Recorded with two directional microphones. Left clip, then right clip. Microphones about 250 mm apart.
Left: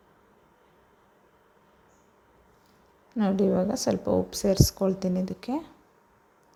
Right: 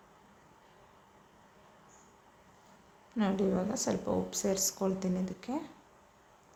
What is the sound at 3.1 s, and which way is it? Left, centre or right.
Speech, left.